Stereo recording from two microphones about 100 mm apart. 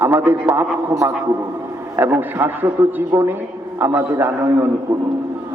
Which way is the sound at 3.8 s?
20° right (ahead or behind).